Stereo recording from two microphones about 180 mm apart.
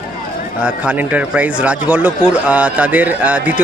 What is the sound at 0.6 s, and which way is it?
Speech, 10° right (ahead or behind).